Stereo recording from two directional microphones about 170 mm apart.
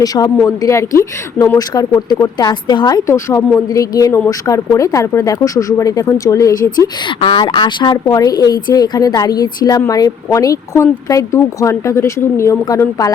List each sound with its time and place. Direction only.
0.0 s a woman's voice: 20° left (ahead or behind)
6.8 s a woman's voice: 30° left (ahead or behind)